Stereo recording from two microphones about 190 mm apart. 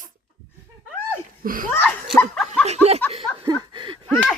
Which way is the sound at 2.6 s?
35° right (ahead or behind).